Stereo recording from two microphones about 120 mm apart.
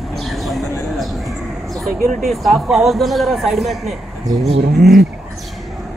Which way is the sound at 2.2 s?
Centre (ahead or behind).